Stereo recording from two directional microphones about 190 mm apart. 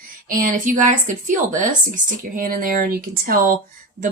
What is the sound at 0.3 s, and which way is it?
Speech, 45° right (ahead or behind).